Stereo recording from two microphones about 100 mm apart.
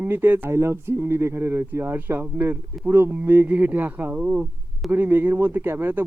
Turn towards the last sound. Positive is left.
turn(degrees=-20)  # may be behind; listen again after turning